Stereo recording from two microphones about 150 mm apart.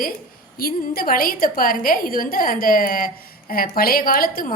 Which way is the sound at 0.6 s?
75° left (ahead or behind).